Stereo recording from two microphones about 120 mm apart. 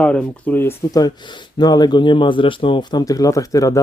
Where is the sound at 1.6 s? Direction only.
35° left (ahead or behind).